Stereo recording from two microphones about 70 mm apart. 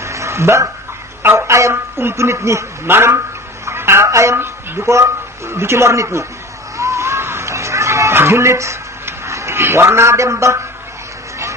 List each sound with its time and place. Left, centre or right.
0.0 s dog: right
1.2 s a man's voice: right
6.7 s a sound: right